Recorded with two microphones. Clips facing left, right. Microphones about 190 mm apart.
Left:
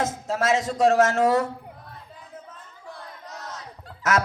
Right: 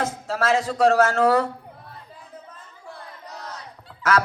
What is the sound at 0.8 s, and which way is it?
Speech, 20° left (ahead or behind).